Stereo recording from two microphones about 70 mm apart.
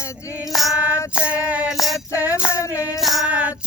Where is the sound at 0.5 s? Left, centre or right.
Centre.